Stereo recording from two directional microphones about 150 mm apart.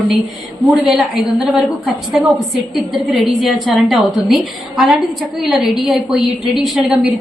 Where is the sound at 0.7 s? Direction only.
Centre (ahead or behind).